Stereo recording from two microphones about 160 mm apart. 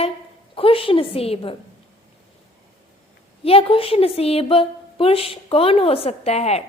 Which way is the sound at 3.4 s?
35° left (ahead or behind).